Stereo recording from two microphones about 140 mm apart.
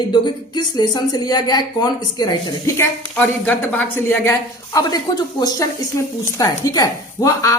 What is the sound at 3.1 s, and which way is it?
A woman's voice, 10° left (ahead or behind).